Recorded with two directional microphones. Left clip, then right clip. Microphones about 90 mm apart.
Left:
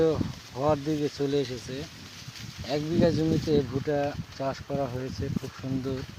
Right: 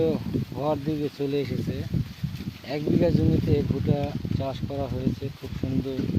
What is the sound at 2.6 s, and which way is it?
Speech, 20° right (ahead or behind).